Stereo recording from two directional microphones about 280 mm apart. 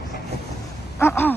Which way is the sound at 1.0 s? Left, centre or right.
Centre.